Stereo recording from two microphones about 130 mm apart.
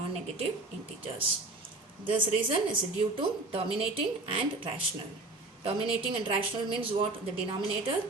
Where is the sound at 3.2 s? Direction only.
45° right (ahead or behind).